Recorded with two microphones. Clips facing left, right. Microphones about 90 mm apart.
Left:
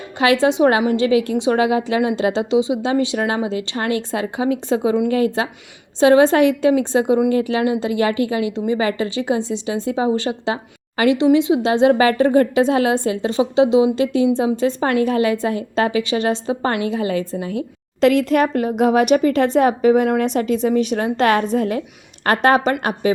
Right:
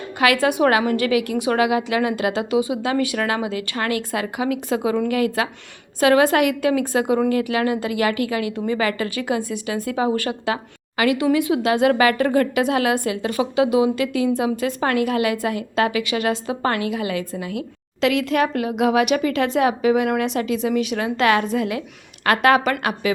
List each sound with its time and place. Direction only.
0.2 s a woman's voice: 25° left (ahead or behind)